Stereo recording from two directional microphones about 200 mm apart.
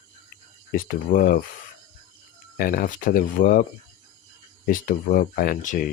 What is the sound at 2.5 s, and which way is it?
Speech, 45° left (ahead or behind).